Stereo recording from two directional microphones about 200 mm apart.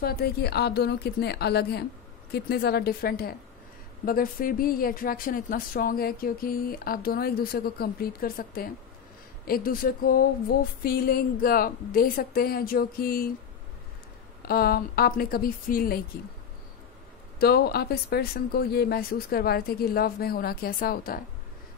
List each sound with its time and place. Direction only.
0.0 s a woman's voice: 50° left (ahead or behind)
14.5 s speech: 50° left (ahead or behind)
17.4 s speech: 50° left (ahead or behind)